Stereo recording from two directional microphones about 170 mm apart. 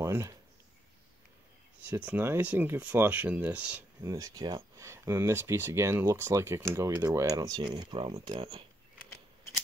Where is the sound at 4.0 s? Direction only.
20° right (ahead or behind).